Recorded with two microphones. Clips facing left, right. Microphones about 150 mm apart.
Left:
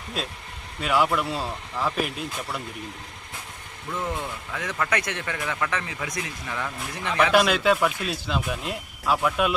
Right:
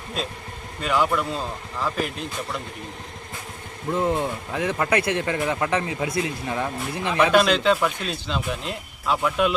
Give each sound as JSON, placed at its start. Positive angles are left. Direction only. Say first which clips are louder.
{"t": 0.2, "sound": "speech", "louder": "right 3 dB", "side_deg": 5}
{"t": 3.8, "sound": "speech", "louder": "right 7 dB", "side_deg": -30}
{"t": 7.3, "sound": "speech", "louder": "right 1 dB", "side_deg": 10}